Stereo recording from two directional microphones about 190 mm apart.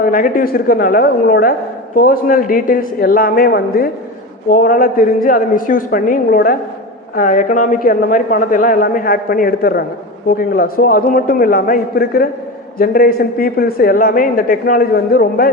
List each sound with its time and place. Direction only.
0.0 s a woman's voice: 50° left (ahead or behind)